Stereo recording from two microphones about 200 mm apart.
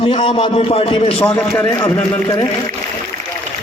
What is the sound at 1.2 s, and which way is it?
A man's voice, 5° left (ahead or behind).